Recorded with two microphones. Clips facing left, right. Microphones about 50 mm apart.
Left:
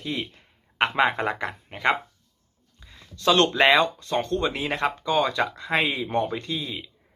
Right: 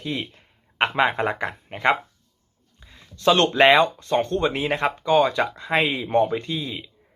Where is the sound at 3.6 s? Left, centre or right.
Centre.